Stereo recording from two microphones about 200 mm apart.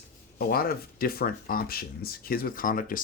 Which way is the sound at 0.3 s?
50° left (ahead or behind).